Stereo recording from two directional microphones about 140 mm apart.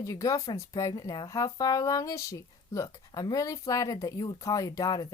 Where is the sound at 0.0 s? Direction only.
25° left (ahead or behind).